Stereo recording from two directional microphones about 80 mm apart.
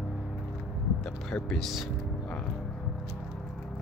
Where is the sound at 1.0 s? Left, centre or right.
Centre.